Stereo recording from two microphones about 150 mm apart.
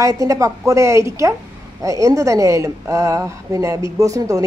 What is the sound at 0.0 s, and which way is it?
A woman's voice, 20° right (ahead or behind).